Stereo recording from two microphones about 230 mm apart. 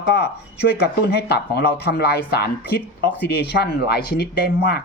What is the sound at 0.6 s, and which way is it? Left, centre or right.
A woman's voice, left.